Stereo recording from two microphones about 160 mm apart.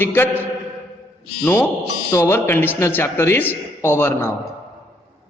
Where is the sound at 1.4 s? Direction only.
10° left (ahead or behind).